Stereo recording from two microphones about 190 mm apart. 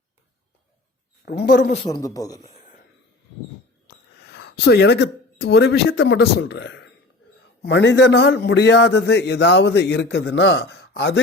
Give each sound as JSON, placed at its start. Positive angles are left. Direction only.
{"t": 1.2, "sound": "a man's voice", "side_deg": 55}
{"t": 1.9, "sound": "a man's voice", "side_deg": 20}
{"t": 3.8, "sound": "a man's voice", "side_deg": 60}